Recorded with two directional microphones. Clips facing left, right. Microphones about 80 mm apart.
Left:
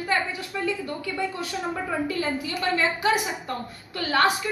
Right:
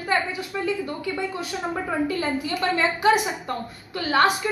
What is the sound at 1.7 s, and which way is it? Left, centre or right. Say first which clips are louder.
A woman's voice: right 4 dB; right.